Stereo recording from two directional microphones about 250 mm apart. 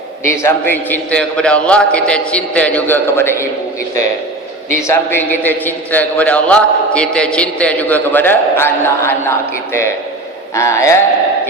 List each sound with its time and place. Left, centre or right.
0.3 s a man's voice: centre
4.7 s a man's voice: centre
10.5 s a man's voice: centre